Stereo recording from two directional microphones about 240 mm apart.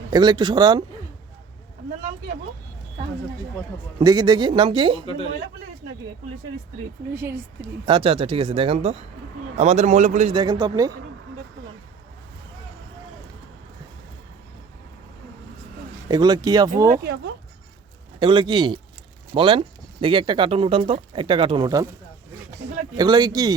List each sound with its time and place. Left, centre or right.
0.1 s speech: centre
4.0 s speech: centre
7.9 s speech: right
10.3 s speech: centre
16.0 s speech: centre
16.9 s speech: right
18.2 s speech: centre
23.0 s speech: centre